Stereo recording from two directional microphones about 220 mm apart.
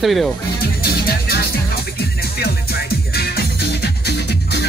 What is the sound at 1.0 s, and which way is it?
Music, 45° left (ahead or behind).